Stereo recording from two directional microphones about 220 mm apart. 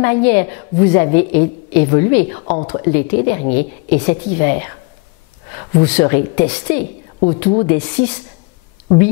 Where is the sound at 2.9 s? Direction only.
15° left (ahead or behind).